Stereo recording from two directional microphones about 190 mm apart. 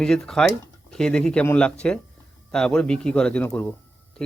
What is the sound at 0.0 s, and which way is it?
A man's voice, 5° left (ahead or behind).